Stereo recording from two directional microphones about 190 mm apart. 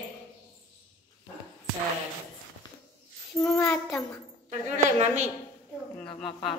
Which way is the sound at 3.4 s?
10° left (ahead or behind).